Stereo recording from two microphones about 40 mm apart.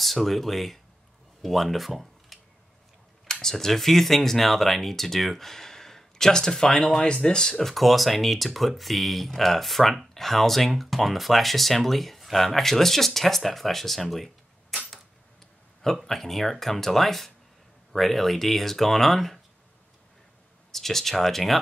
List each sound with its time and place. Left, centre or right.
0.0 s speech: centre
3.3 s speech: centre
7.6 s speech: centre
16.1 s speech: centre
20.7 s speech: centre